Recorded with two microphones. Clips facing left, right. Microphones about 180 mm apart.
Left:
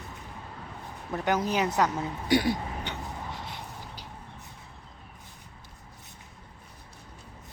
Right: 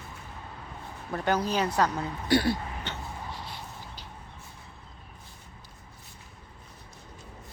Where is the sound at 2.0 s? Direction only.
15° left (ahead or behind).